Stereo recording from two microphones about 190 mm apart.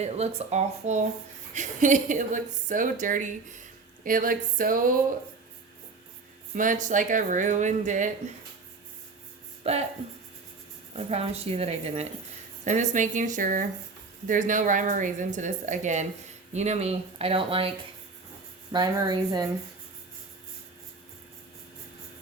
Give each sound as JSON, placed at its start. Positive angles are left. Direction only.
{"t": 0.0, "sound": "a woman's voice", "side_deg": -35}
{"t": 6.5, "sound": "a woman's voice", "side_deg": -45}
{"t": 9.7, "sound": "a woman's voice", "side_deg": -30}
{"t": 10.9, "sound": "a woman's voice", "side_deg": -35}
{"t": 18.7, "sound": "speech", "side_deg": -20}